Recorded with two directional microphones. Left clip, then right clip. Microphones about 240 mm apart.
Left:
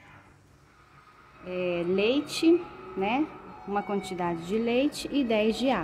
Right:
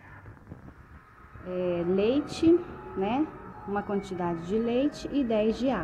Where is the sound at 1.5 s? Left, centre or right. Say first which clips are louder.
Even; centre.